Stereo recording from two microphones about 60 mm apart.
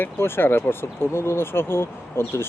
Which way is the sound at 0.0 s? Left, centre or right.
Left.